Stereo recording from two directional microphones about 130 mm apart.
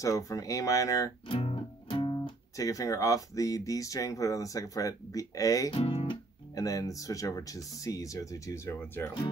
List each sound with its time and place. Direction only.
0.0 s speech: 25° left (ahead or behind)
1.3 s speech: 45° left (ahead or behind); by 5.8 s 25° left (ahead or behind)
5.9 s guitar: 40° left (ahead or behind)
6.5 s speech: 25° left (ahead or behind)